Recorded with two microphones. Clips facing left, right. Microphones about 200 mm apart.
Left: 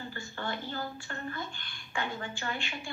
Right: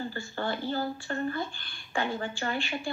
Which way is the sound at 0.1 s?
30° right (ahead or behind).